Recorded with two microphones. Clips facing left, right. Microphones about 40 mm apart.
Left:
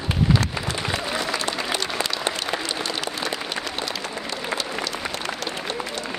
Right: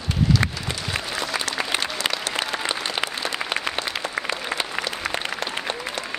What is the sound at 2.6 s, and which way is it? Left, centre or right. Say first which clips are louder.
Applause: right 2 dB; right.